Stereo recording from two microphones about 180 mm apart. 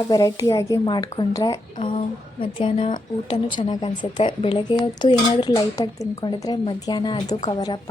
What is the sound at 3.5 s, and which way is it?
Speech, 25° left (ahead or behind).